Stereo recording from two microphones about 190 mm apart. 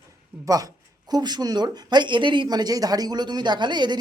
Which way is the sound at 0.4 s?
20° right (ahead or behind).